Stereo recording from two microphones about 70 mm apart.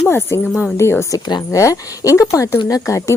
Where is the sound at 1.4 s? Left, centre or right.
Left.